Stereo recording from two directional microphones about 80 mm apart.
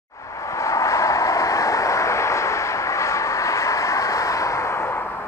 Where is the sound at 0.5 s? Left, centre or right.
Left.